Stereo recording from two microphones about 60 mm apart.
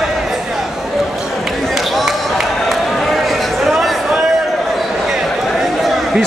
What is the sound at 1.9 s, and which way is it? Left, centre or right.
Run, centre.